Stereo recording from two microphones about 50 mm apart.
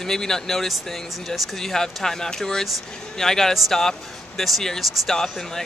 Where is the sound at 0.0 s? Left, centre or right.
Centre.